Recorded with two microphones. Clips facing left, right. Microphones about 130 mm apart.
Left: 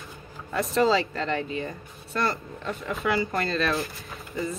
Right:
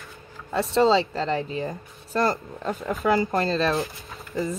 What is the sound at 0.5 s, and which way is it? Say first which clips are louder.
Speech: right 3 dB; 30° right (ahead or behind).